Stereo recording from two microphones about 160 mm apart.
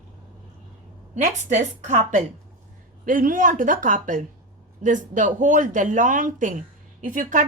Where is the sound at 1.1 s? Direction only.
50° right (ahead or behind).